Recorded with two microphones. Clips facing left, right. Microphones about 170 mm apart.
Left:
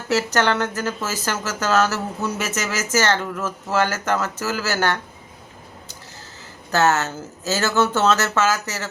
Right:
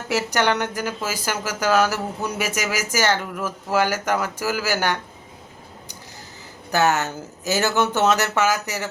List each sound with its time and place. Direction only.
0.1 s speech: 15° right (ahead or behind)
6.7 s speech: 15° right (ahead or behind)